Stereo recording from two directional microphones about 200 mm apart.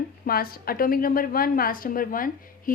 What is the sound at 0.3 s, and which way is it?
A woman's voice, 50° left (ahead or behind).